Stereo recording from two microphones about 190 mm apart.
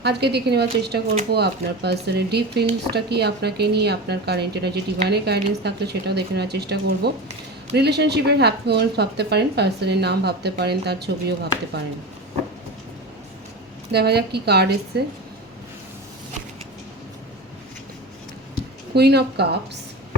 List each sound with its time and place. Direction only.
0.0 s speech: 60° right (ahead or behind)
13.9 s speech: 60° right (ahead or behind)
18.9 s speech: 60° right (ahead or behind)